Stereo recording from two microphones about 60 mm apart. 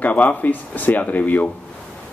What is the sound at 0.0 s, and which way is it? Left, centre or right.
Speech, left.